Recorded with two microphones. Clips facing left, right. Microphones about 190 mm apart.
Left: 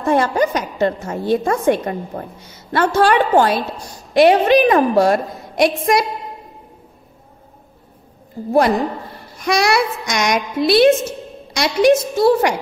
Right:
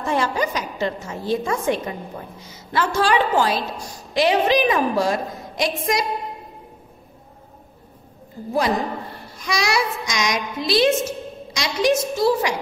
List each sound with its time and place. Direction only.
0.0 s a woman's voice: 55° left (ahead or behind)
9.4 s a woman's voice: 60° left (ahead or behind)